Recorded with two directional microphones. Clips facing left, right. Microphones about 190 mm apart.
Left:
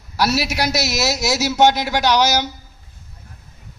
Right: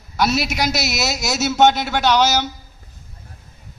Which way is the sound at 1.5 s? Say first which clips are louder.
Right 1 dB; 10° left (ahead or behind).